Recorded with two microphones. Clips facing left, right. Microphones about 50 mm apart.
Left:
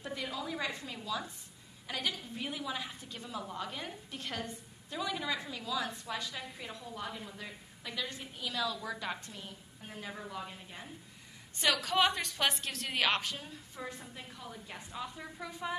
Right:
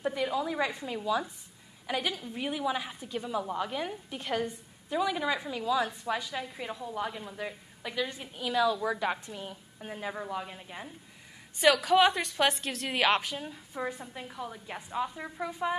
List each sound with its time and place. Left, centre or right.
0.0 s a woman's voice: centre
11.6 s a woman's voice: centre